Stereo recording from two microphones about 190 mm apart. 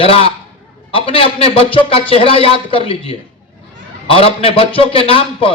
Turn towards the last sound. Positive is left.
turn(degrees=30)  # may be behind; listen again after turning